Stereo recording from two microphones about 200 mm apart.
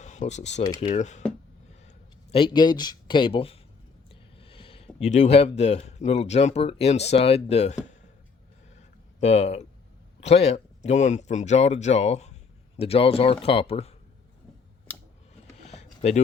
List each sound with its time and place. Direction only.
0.0 s speech: 35° left (ahead or behind)
0.6 s speech: 20° left (ahead or behind)
0.9 s speech: 40° left (ahead or behind)
2.3 s speech: 25° left (ahead or behind)
9.2 s speech: 30° left (ahead or behind)
15.6 s a sound: 35° left (ahead or behind)